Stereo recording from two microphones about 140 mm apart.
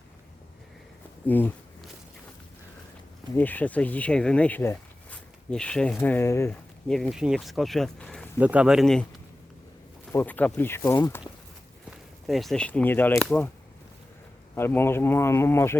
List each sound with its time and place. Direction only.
1.3 s speech: 15° left (ahead or behind)
3.3 s speech: 10° left (ahead or behind)
6.5 s speech: 5° left (ahead or behind)
8.4 s speech: 10° right (ahead or behind)
10.1 s speech: 10° left (ahead or behind)
11.9 s speech: centre (ahead or behind)
14.5 s speech: 15° left (ahead or behind)